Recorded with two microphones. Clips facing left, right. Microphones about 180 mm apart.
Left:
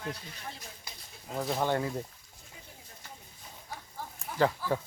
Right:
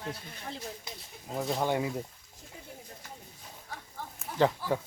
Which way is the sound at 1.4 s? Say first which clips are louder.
Even; centre (ahead or behind).